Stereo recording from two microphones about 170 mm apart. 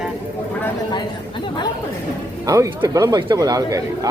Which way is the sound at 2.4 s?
20° right (ahead or behind).